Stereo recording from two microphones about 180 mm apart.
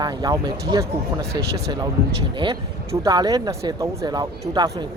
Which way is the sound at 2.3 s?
25° right (ahead or behind).